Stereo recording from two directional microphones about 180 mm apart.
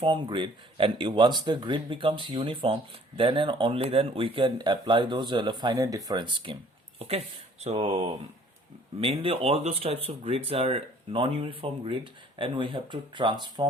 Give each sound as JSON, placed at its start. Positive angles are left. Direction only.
{"t": 0.0, "sound": "speech", "side_deg": -25}
{"t": 7.6, "sound": "speech", "side_deg": -35}